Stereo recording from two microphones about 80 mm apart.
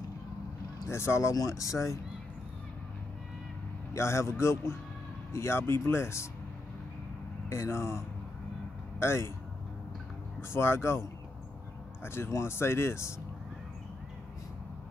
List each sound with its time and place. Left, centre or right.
0.8 s speech: left
3.9 s speech: left
7.4 s speech: left
9.0 s speech: left
10.5 s speech: left